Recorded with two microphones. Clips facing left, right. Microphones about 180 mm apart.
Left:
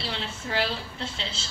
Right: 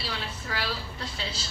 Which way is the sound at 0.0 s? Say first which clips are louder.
Left 2 dB; 25° left (ahead or behind).